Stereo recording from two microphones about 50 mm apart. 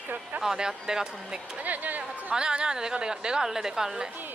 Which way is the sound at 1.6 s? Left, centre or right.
Right.